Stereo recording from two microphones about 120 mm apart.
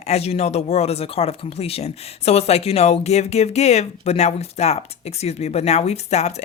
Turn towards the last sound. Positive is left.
turn(degrees=70)  # may be behind; listen again after turning